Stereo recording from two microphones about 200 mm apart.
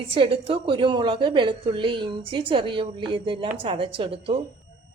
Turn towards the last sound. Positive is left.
turn(degrees=-30)  # may be behind; listen again after turning